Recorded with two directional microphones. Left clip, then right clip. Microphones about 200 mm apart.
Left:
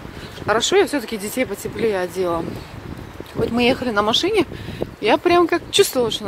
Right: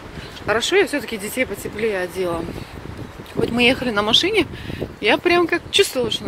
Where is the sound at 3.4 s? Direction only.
10° left (ahead or behind).